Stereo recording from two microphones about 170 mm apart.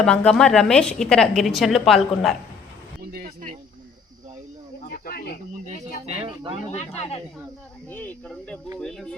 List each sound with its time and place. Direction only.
0.0 s a woman's voice: 5° left (ahead or behind)
3.0 s speech: 60° right (ahead or behind)
4.9 s cricket: 60° left (ahead or behind)
5.6 s speech: 45° right (ahead or behind)
6.7 s speech: 40° left (ahead or behind)
7.9 s a woman's voice: 10° left (ahead or behind)